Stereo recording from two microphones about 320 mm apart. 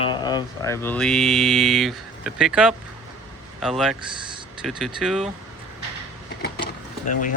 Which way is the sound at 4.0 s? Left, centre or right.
Centre.